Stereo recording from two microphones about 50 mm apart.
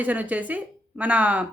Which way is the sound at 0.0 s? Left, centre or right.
Right.